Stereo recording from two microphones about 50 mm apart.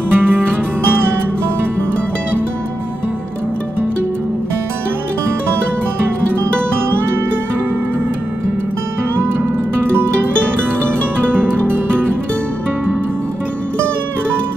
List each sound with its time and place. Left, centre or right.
0.1 s music: right
11.3 s music: right